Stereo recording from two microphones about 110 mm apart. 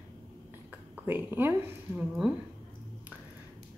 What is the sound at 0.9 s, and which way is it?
A woman's voice, 20° right (ahead or behind).